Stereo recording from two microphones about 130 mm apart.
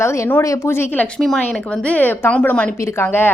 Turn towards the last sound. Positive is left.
turn(degrees=15)  # may be behind; listen again after turning